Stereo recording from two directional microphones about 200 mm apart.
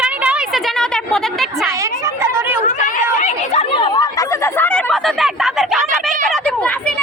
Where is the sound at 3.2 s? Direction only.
30° left (ahead or behind).